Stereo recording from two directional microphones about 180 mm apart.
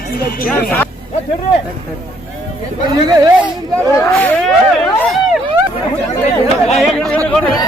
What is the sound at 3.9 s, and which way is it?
Speech, 5° left (ahead or behind).